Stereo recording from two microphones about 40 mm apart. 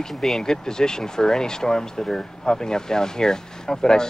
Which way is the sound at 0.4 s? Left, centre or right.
Centre.